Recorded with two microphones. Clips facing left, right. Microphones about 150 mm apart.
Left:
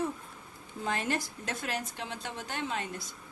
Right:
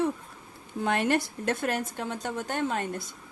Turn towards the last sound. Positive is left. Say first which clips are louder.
# right 6 dB
turn(degrees=-50)  # may be behind; listen again after turning